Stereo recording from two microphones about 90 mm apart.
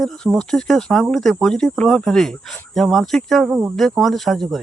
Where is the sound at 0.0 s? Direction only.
10° left (ahead or behind).